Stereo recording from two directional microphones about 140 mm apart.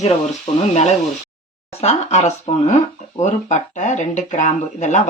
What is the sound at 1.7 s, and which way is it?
Speech, 50° left (ahead or behind).